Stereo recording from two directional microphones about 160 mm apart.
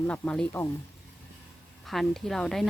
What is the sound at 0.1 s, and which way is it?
Speech, 5° left (ahead or behind).